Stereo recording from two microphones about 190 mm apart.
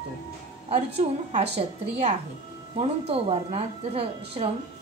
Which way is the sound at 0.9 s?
35° right (ahead or behind).